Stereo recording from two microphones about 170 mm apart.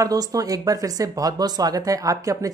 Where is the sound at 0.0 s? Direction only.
20° right (ahead or behind).